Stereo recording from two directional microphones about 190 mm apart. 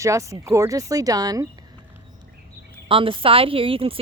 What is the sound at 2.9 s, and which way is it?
A woman's voice, 25° right (ahead or behind).